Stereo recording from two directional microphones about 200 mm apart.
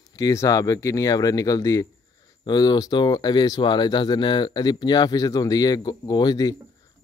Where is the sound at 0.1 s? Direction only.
15° left (ahead or behind).